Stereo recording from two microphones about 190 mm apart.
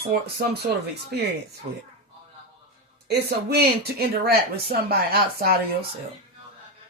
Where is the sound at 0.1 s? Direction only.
55° right (ahead or behind).